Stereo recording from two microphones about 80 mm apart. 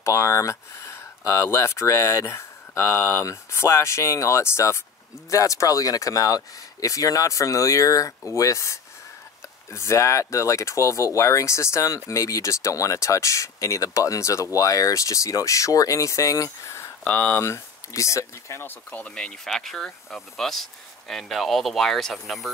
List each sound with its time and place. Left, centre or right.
0.0 s speech: left
17.0 s speech: left
17.4 s speech: left
18.7 s speech: centre